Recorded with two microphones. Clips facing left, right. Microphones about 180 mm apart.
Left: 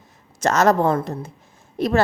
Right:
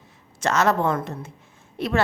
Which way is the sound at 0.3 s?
40° left (ahead or behind).